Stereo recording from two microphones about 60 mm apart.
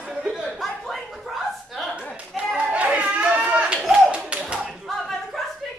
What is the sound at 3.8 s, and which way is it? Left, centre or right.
Clapping, centre.